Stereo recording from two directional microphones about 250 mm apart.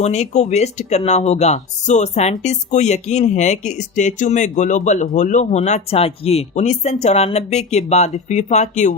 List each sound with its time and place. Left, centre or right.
0.0 s speech: left